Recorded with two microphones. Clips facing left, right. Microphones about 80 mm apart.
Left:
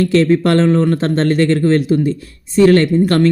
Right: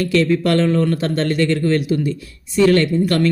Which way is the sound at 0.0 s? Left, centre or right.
Left.